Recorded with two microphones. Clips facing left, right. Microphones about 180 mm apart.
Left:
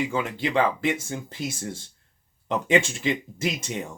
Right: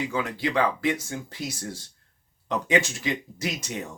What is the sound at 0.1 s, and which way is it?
Speech, 25° left (ahead or behind).